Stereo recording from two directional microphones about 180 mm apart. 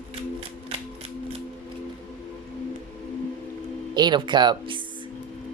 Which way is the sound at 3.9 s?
25° right (ahead or behind).